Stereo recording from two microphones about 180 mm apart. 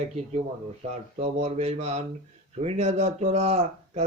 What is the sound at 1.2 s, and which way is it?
Speech, 35° right (ahead or behind).